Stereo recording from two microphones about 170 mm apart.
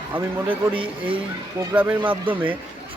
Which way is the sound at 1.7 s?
10° right (ahead or behind).